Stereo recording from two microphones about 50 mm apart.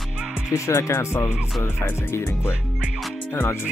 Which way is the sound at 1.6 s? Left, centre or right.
Left.